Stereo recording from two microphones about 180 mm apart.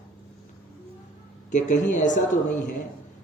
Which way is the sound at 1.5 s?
45° left (ahead or behind).